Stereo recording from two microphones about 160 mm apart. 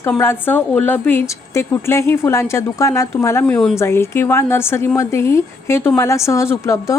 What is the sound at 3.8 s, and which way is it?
A woman's voice, 15° left (ahead or behind).